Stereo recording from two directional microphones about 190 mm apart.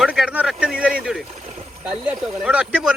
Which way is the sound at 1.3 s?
35° right (ahead or behind).